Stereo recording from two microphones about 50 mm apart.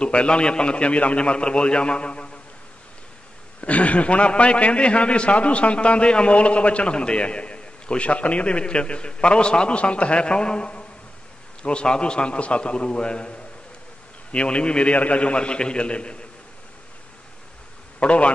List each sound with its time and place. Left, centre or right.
0.0 s a man's voice: left
3.6 s a man's voice: left
14.3 s a man's voice: left
17.9 s a man's voice: left